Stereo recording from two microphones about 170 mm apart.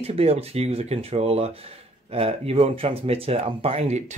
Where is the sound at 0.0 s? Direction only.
35° right (ahead or behind).